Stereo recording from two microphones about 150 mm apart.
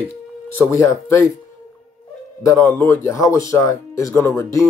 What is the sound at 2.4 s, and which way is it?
Speech, 15° left (ahead or behind).